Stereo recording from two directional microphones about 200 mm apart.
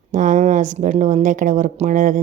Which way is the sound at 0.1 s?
40° right (ahead or behind).